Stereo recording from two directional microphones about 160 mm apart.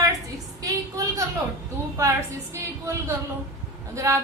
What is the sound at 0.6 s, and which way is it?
A woman's voice, 20° right (ahead or behind).